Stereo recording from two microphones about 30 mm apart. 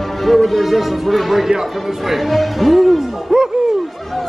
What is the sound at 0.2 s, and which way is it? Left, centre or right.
Speech, centre.